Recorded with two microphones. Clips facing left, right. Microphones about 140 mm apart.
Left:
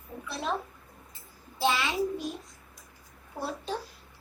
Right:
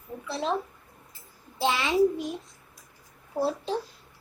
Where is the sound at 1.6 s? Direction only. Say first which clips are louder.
Right 5 dB; 20° right (ahead or behind).